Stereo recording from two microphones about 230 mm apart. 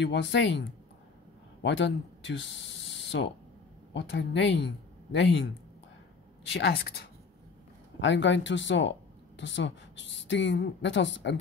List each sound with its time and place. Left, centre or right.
0.0 s a woman's voice: left
6.5 s a woman's voice: left